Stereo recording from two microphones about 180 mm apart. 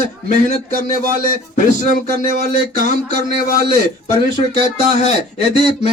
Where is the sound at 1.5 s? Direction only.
45° left (ahead or behind).